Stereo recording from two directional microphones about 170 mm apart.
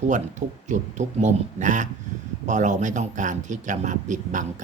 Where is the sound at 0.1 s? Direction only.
45° right (ahead or behind).